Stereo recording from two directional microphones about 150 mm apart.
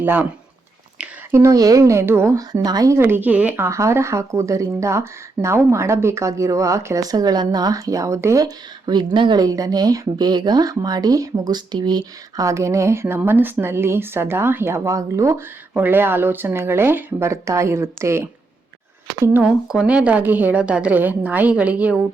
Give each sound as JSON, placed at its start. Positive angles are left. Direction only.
{"t": 0.0, "sound": "a woman's voice", "side_deg": -10}